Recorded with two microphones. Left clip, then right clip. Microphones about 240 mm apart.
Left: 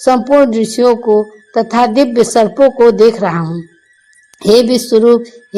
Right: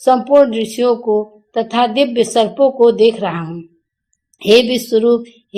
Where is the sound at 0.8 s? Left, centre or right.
Left.